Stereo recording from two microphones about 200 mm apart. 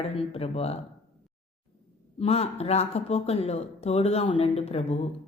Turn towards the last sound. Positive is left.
turn(degrees=30)  # may be behind; listen again after turning